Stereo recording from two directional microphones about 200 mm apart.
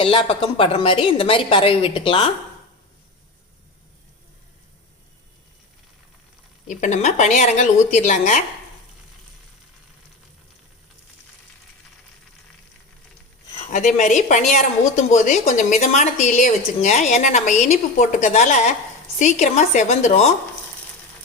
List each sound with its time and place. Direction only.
0.0 s a woman's voice: 25° left (ahead or behind)
6.7 s speech: 40° left (ahead or behind)
13.5 s speech: 35° left (ahead or behind)